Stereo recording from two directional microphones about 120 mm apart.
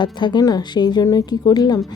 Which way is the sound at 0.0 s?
40° left (ahead or behind).